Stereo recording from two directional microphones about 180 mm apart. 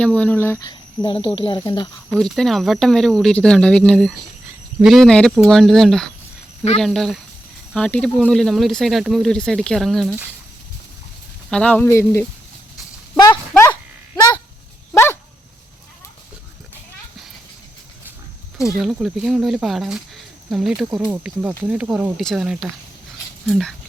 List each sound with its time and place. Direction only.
0.0 s speech: 5° left (ahead or behind)
0.7 s speech: 25° left (ahead or behind)
2.1 s speech: centre (ahead or behind)
11.5 s speech: 10° left (ahead or behind)
13.5 s livestock: 10° left (ahead or behind)
14.9 s dog: 15° left (ahead or behind)
18.8 s speech: centre (ahead or behind)